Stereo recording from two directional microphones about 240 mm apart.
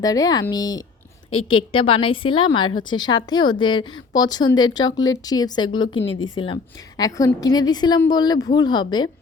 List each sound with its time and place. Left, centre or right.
0.0 s a woman's voice: centre